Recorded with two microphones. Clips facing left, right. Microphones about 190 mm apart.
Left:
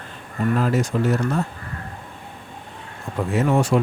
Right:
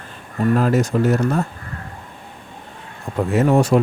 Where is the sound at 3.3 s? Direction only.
40° right (ahead or behind).